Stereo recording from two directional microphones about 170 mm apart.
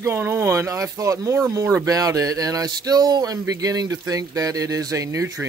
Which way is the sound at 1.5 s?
20° right (ahead or behind).